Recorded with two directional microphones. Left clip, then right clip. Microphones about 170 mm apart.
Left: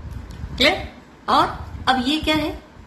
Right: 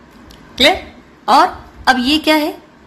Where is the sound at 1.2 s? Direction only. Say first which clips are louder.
Right 7 dB; 55° right (ahead or behind).